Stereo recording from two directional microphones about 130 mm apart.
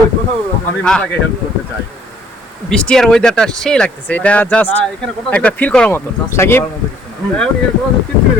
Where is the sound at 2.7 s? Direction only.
5° left (ahead or behind).